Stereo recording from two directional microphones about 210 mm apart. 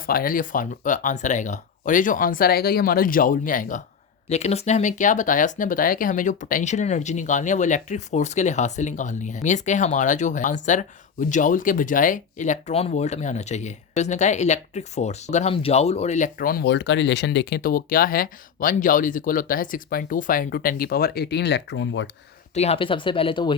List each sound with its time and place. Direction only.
0.0 s speech: 40° left (ahead or behind); by 22.1 s 60° left (ahead or behind)
22.5 s speech: 30° left (ahead or behind)